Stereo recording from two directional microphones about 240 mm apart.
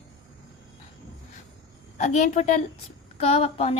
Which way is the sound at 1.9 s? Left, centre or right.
Left.